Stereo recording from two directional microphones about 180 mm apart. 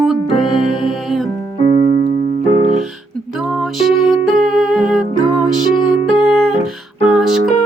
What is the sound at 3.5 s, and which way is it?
Music, centre (ahead or behind).